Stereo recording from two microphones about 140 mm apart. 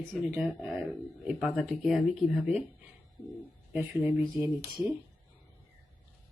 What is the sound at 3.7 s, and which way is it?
Speech, 10° right (ahead or behind).